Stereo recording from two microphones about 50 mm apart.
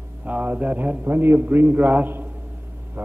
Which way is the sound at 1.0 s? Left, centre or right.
Right.